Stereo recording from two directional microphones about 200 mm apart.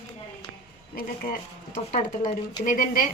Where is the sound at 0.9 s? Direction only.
45° left (ahead or behind).